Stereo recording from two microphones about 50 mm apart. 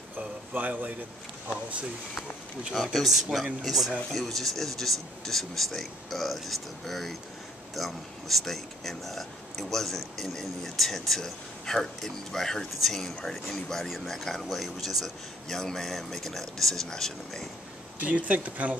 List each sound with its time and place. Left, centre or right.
0.5 s speech: right
2.7 s speech: centre
15.4 s speech: centre
17.9 s speech: right